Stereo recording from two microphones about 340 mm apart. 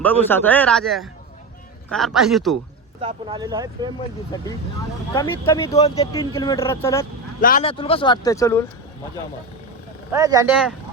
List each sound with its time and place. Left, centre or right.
0.0 s speech: centre
3.0 s speech: centre
4.3 s speech: centre
7.4 s speech: centre
10.2 s speech: centre